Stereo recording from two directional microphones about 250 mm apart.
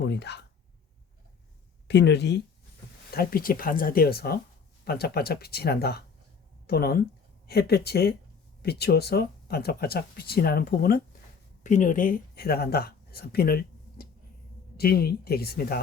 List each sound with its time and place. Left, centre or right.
0.0 s speech: left
1.9 s speech: left